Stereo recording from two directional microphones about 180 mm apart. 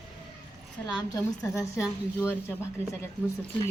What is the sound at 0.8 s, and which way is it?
A woman's voice, 20° left (ahead or behind).